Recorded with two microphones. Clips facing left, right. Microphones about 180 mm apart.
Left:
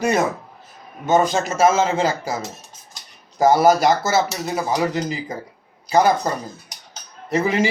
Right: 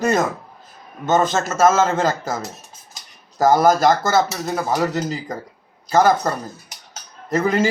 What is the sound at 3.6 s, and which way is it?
Speech, 10° left (ahead or behind).